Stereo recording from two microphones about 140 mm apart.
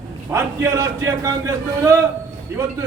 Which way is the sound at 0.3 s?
20° right (ahead or behind).